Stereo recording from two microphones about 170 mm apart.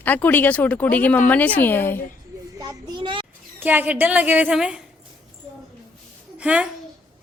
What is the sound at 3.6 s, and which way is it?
A woman's voice, 10° right (ahead or behind).